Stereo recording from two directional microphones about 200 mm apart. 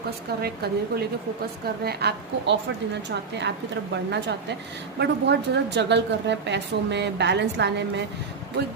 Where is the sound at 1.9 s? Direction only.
55° right (ahead or behind).